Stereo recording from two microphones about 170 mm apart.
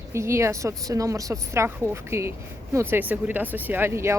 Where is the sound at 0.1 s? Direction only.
15° right (ahead or behind).